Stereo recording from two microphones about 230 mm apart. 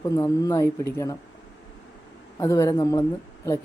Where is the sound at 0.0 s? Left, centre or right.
Centre.